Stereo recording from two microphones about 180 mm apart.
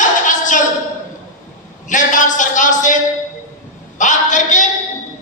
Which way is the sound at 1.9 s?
45° left (ahead or behind).